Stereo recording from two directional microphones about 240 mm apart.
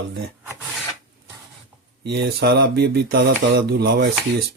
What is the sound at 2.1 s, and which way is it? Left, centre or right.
Speech, right.